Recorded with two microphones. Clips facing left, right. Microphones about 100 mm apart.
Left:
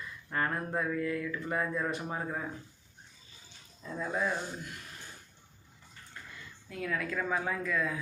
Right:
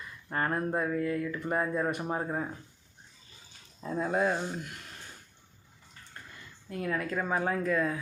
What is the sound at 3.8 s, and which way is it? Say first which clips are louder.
Speech: right 5 dB; 40° right (ahead or behind).